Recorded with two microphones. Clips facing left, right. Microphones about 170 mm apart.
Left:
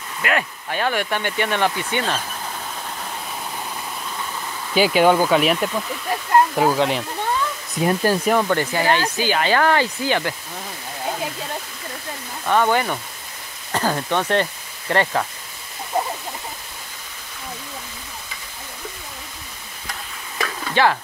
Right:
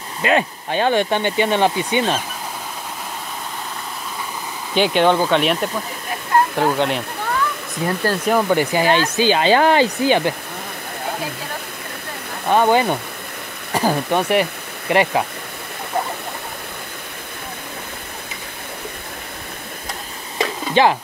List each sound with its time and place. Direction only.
0.2 s speech: 25° right (ahead or behind)
4.7 s speech: 5° left (ahead or behind)
7.8 s speech: 15° left (ahead or behind)
8.3 s speech: 10° right (ahead or behind)
12.4 s speech: 20° right (ahead or behind)
20.3 s stir: 20° right (ahead or behind)